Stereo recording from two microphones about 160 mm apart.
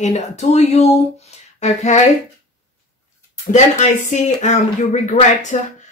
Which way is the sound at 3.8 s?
50° left (ahead or behind).